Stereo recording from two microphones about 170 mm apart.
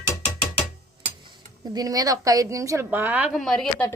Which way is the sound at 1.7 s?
20° right (ahead or behind).